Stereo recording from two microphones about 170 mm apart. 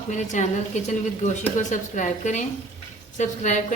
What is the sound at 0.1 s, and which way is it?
A woman's voice, 45° left (ahead or behind).